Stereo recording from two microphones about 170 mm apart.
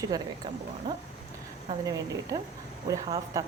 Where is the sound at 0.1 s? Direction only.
20° right (ahead or behind).